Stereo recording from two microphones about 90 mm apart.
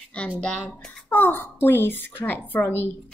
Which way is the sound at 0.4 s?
10° left (ahead or behind).